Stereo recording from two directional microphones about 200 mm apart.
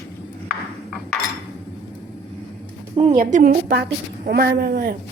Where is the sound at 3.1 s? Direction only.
45° right (ahead or behind).